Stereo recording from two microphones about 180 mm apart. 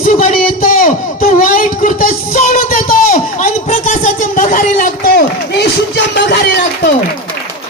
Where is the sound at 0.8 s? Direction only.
50° left (ahead or behind); by 6.4 s 70° left (ahead or behind).